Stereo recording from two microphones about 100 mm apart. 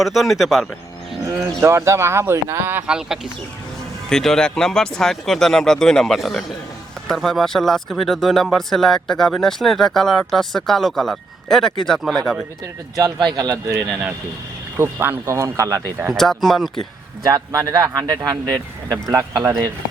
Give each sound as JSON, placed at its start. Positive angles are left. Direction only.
{"t": 0.0, "sound": "speech", "side_deg": 0}
{"t": 1.3, "sound": "speech", "side_deg": -25}
{"t": 2.8, "sound": "speech", "side_deg": -10}
{"t": 4.1, "sound": "speech", "side_deg": 5}
{"t": 13.0, "sound": "speech", "side_deg": -45}
{"t": 14.8, "sound": "speech", "side_deg": -20}
{"t": 16.0, "sound": "speech", "side_deg": 0}
{"t": 17.2, "sound": "speech", "side_deg": -40}